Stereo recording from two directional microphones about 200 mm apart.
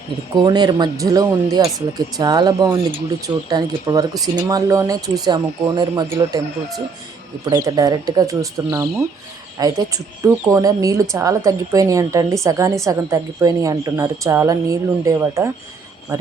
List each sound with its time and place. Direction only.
0.3 s speech: 20° right (ahead or behind)
7.5 s speech: 20° right (ahead or behind)